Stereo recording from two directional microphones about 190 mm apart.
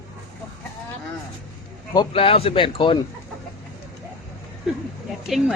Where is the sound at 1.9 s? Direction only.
25° left (ahead or behind).